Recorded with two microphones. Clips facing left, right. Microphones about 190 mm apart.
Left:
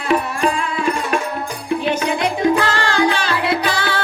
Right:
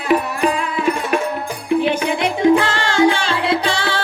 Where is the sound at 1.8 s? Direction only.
20° right (ahead or behind).